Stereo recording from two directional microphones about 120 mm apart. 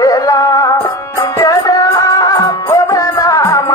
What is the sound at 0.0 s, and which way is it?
Music, 30° left (ahead or behind).